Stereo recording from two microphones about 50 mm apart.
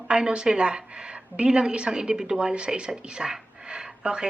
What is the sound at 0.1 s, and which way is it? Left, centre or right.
A woman's voice, centre.